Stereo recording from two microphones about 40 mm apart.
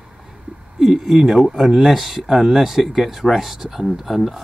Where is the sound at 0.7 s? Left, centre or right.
Centre.